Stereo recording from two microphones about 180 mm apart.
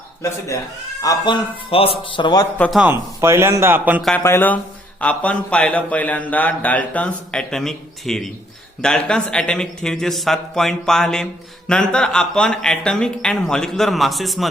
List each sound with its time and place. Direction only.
0.2 s speech: 15° left (ahead or behind)
2.6 s speech: centre (ahead or behind)
2.9 s speech: 15° right (ahead or behind)
4.0 s speech: 10° left (ahead or behind)